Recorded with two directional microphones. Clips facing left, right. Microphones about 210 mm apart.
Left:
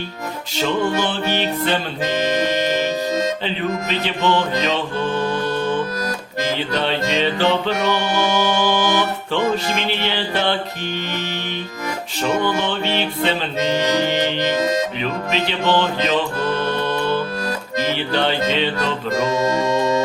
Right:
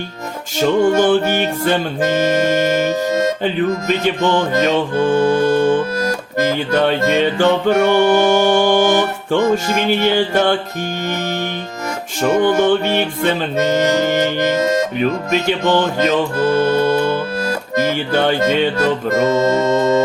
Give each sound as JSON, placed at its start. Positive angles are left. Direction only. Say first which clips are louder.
{"t": 0.5, "sound": "music", "louder": "right 7 dB", "side_deg": -45}
{"t": 12.5, "sound": "music", "louder": "right 7 dB", "side_deg": -50}